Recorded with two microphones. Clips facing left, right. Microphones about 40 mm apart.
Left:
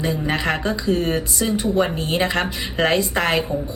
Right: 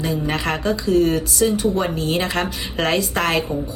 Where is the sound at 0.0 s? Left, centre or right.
Left.